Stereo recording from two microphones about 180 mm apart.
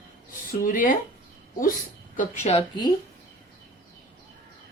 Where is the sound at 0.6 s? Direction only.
50° left (ahead or behind).